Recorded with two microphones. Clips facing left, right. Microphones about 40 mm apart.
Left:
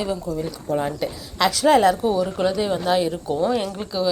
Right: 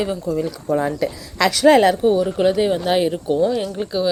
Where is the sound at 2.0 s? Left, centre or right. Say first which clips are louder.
Right 4 dB; right.